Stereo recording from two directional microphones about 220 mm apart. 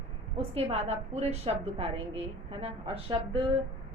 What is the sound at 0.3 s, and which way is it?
A woman's voice, 30° right (ahead or behind).